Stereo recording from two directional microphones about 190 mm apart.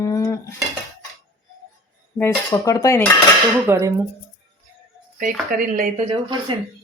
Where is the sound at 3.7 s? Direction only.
15° right (ahead or behind).